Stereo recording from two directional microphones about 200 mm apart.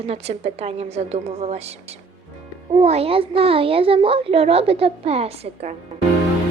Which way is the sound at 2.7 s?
30° right (ahead or behind).